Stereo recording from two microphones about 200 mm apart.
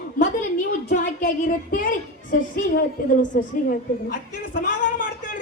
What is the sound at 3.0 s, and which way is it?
Speech, 45° left (ahead or behind).